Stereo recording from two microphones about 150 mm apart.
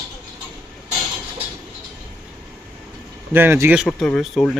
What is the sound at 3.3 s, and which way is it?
Speech, 15° right (ahead or behind).